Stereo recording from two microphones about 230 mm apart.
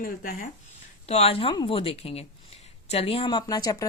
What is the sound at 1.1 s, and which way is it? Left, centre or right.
Speech, left.